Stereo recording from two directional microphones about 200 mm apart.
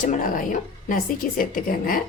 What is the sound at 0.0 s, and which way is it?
Speech, 40° left (ahead or behind).